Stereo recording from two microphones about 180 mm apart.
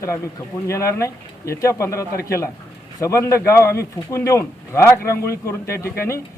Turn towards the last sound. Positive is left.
turn(degrees=15)  # may be behind; listen again after turning